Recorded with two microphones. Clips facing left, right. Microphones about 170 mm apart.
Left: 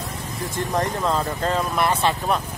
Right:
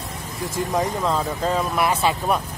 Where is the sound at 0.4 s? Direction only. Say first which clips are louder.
Right 1 dB; centre (ahead or behind).